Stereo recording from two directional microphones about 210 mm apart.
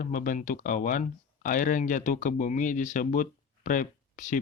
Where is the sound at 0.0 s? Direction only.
40° left (ahead or behind).